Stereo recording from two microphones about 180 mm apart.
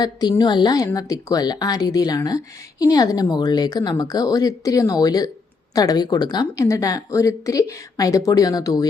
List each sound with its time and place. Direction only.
0.0 s speech: 25° left (ahead or behind)